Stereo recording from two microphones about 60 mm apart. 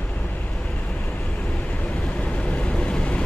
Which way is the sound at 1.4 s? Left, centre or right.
Left.